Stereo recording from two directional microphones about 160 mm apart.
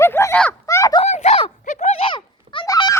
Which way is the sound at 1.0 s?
45° left (ahead or behind).